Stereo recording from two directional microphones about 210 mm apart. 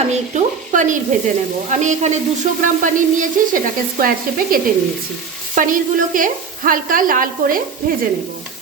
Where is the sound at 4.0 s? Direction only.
45° right (ahead or behind).